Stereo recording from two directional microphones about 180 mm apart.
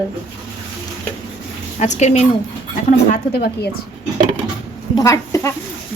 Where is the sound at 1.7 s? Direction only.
40° left (ahead or behind).